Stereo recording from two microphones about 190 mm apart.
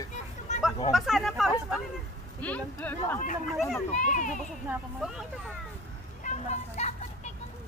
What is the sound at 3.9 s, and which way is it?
Speech, 40° left (ahead or behind).